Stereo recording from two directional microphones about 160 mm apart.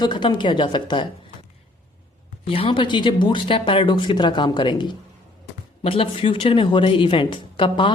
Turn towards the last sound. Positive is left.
turn(degrees=30)  # may be behind; listen again after turning